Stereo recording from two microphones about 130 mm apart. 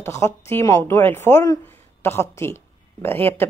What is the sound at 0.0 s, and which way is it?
Speech, 20° left (ahead or behind).